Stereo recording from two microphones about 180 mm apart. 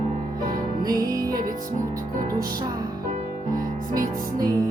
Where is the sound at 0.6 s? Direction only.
20° right (ahead or behind).